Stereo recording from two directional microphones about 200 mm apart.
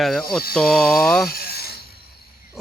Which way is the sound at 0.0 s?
Centre (ahead or behind).